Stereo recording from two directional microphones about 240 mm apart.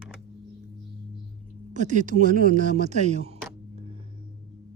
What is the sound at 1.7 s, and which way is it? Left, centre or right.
Speech, right.